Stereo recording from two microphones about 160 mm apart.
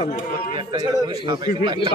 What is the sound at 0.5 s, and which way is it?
A man's voice, 30° right (ahead or behind).